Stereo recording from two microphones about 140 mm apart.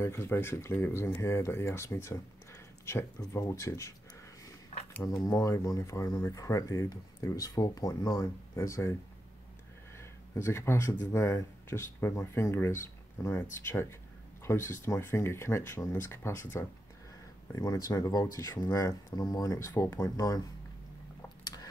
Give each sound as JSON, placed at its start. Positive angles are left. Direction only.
{"t": 0.0, "sound": "speech", "side_deg": 20}
{"t": 5.0, "sound": "speech", "side_deg": 25}
{"t": 9.9, "sound": "speech", "side_deg": 20}